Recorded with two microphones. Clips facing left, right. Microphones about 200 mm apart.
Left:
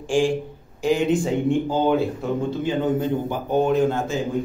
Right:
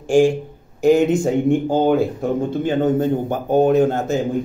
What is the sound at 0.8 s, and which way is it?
Speech, 45° right (ahead or behind).